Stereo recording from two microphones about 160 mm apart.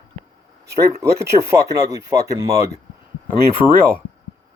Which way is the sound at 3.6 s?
5° right (ahead or behind).